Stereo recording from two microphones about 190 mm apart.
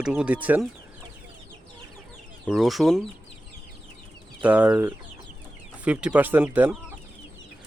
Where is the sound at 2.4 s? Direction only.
Centre (ahead or behind).